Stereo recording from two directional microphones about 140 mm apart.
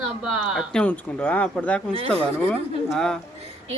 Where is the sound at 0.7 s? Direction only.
10° left (ahead or behind).